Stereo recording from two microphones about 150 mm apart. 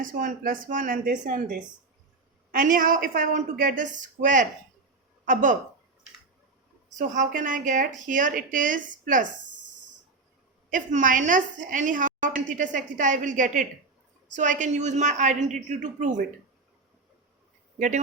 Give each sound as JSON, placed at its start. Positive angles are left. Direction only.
{"t": 0.0, "sound": "a woman's voice", "side_deg": -65}
{"t": 6.9, "sound": "a woman's voice", "side_deg": -55}
{"t": 10.7, "sound": "a woman's voice", "side_deg": -60}
{"t": 17.7, "sound": "a man's voice", "side_deg": -60}